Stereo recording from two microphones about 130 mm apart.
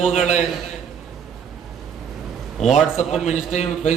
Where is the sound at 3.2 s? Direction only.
65° left (ahead or behind).